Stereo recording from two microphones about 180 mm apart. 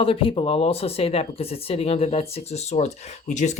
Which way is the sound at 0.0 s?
30° left (ahead or behind).